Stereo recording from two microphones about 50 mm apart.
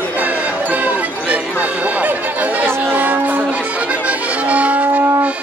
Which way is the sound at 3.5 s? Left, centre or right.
Right.